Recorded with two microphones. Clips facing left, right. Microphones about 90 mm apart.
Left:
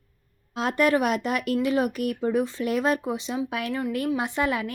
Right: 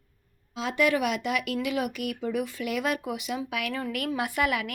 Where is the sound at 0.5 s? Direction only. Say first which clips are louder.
Left 3 dB; 50° left (ahead or behind).